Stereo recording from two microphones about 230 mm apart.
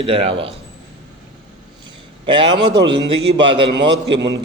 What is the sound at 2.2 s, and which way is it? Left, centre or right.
A man's voice, right.